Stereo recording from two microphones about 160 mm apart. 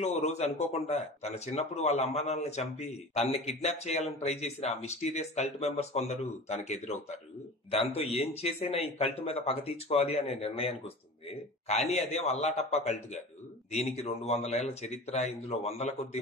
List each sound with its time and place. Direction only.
0.0 s speech: 45° left (ahead or behind)